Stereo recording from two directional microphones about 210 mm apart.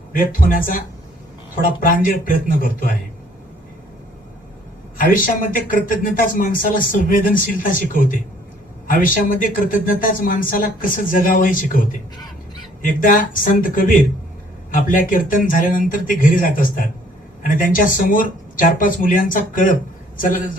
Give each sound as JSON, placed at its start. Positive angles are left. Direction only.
{"t": 0.1, "sound": "speech", "side_deg": 40}
{"t": 4.9, "sound": "a man's voice", "side_deg": 40}